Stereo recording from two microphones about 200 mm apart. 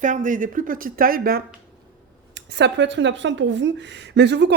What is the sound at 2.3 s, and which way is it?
Speech, 60° right (ahead or behind).